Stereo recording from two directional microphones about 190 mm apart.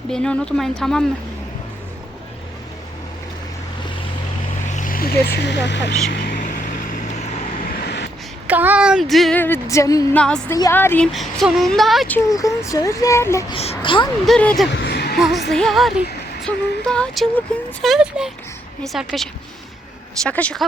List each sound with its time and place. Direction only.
0.1 s speech: 5° left (ahead or behind)
4.7 s speech: 45° left (ahead or behind); by 5.9 s 65° left (ahead or behind)
6.1 s vehicle: 55° left (ahead or behind); by 7.3 s 40° left (ahead or behind)
7.7 s vehicle: 60° left (ahead or behind)
8.4 s speech: 10° right (ahead or behind)
9.4 s a woman's voice: 15° left (ahead or behind)
10.2 s a woman's voice: 5° left (ahead or behind)
13.5 s speech: 30° left (ahead or behind)
14.3 s speech: 5° left (ahead or behind)
14.7 s music: 60° left (ahead or behind)
15.2 s speech: centre (ahead or behind)
15.5 s a sound: centre (ahead or behind)
17.8 s speech: 5° right (ahead or behind)